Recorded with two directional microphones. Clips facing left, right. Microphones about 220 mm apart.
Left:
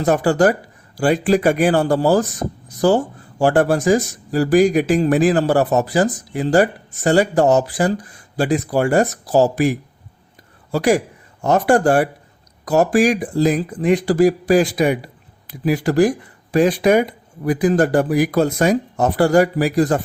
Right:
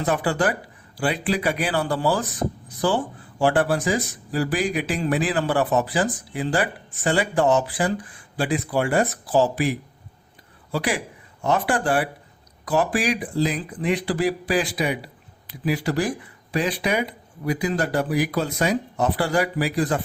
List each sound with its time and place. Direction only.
0.0 s speech: 45° left (ahead or behind)